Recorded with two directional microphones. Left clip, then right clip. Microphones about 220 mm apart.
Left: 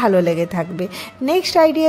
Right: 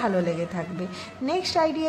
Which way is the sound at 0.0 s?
35° left (ahead or behind).